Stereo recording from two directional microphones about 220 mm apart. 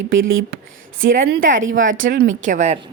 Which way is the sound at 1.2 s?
45° right (ahead or behind).